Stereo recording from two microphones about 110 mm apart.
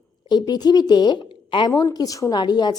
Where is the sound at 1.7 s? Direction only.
35° left (ahead or behind).